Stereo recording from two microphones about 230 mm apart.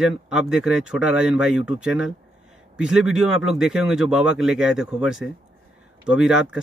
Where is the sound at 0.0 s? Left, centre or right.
Centre.